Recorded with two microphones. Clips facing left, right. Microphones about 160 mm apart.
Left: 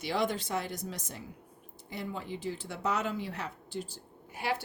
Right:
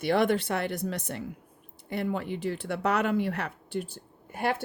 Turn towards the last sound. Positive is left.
turn(degrees=-55)  # may be behind; listen again after turning